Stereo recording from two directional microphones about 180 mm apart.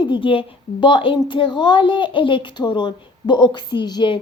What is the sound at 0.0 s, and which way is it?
A woman's voice, 25° left (ahead or behind).